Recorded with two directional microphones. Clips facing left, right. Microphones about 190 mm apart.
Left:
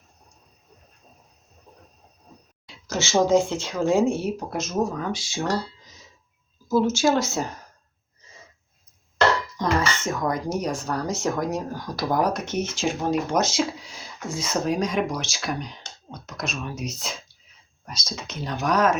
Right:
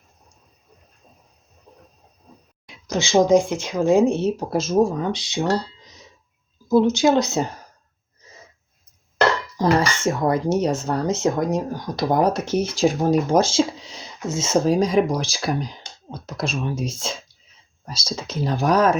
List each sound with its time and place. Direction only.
2.6 s speech: 15° right (ahead or behind)
6.7 s speech: 15° right (ahead or behind)
9.6 s speech: 35° right (ahead or behind)